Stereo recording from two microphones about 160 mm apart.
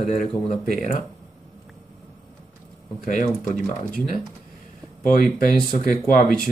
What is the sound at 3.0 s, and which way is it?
Speech, 55° left (ahead or behind).